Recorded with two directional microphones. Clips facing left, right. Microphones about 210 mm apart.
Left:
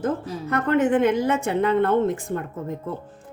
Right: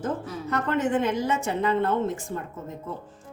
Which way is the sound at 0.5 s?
55° left (ahead or behind).